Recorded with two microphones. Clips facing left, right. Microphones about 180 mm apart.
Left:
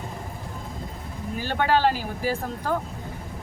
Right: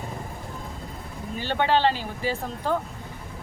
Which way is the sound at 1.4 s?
10° left (ahead or behind).